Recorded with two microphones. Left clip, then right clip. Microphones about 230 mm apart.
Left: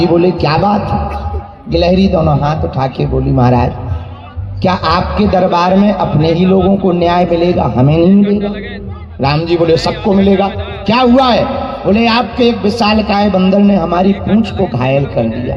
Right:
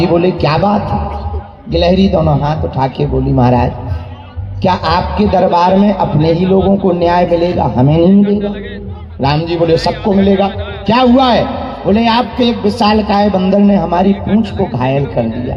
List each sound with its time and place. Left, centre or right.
0.0 s a man's voice: left
6.5 s a man's voice: left
6.8 s a man's voice: left
8.2 s a man's voice: left
9.2 s a man's voice: left